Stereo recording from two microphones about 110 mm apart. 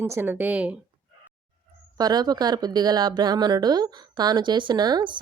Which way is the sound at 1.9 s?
40° right (ahead or behind).